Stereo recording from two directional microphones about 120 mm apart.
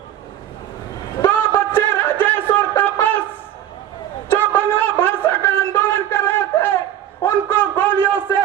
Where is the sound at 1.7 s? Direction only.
15° left (ahead or behind).